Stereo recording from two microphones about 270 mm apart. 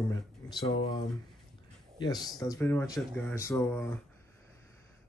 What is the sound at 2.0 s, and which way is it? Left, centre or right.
Speech, centre.